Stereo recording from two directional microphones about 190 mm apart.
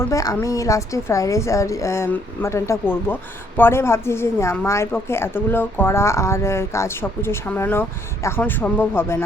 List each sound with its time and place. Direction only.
0.0 s a woman's voice: 15° left (ahead or behind)